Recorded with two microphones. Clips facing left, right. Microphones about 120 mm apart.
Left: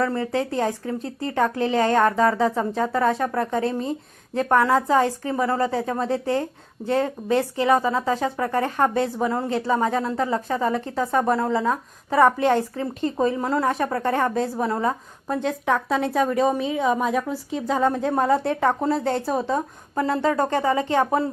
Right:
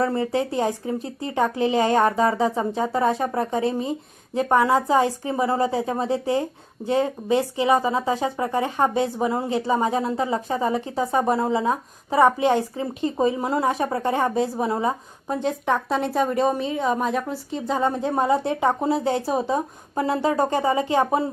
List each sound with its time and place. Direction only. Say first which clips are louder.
0.0 s speech: right 1 dB; 20° right (ahead or behind)
0.3 s speech: right 1 dB; 10° right (ahead or behind)
8.2 s speech: even; 20° right (ahead or behind)
8.5 s a woman's voice: even; 10° right (ahead or behind)
10.8 s a woman's voice: even; 5° right (ahead or behind)
11.1 s speech: even; 15° right (ahead or behind)
15.3 s a woman's voice: even; centre (ahead or behind)